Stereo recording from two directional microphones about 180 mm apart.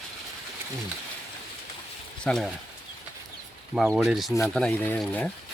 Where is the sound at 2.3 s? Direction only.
5° left (ahead or behind).